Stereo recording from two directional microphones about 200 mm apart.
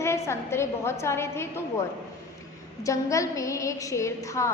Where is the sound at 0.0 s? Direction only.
15° left (ahead or behind).